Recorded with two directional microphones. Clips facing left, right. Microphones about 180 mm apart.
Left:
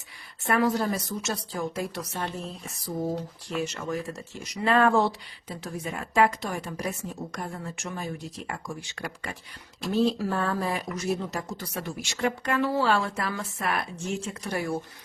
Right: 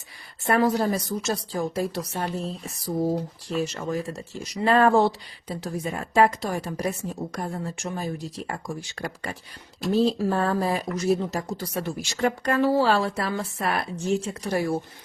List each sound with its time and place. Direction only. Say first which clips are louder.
0.4 s a woman's voice: right 3 dB; 35° right (ahead or behind)